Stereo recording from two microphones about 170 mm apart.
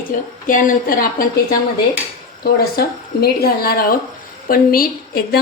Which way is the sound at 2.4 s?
65° left (ahead or behind).